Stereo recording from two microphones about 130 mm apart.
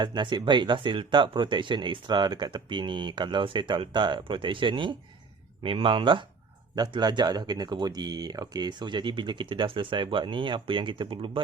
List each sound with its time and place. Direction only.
0.0 s speech: 35° right (ahead or behind)